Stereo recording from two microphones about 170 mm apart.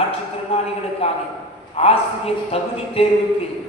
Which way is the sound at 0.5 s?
35° left (ahead or behind).